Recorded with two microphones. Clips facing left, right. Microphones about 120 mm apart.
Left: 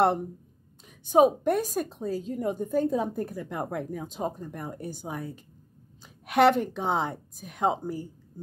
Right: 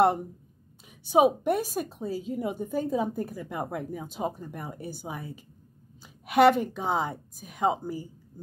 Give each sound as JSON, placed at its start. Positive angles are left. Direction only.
{"t": 1.1, "sound": "a woman's voice", "side_deg": -10}